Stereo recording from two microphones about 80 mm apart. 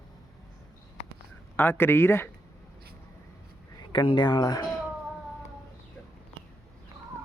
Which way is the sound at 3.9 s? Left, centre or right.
Left.